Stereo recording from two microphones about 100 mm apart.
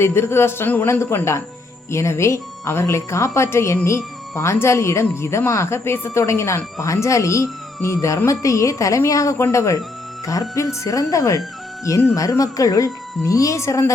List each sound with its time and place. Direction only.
0.0 s a woman's voice: 25° left (ahead or behind)